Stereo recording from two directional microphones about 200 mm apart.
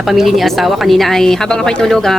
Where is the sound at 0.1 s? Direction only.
Centre (ahead or behind).